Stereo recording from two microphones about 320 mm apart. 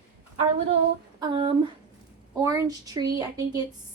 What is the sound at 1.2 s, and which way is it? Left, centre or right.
Speech, centre.